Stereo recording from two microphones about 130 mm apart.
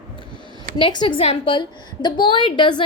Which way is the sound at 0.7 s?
40° left (ahead or behind).